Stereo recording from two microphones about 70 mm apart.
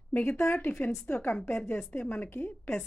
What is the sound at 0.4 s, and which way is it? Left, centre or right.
A woman's voice, left.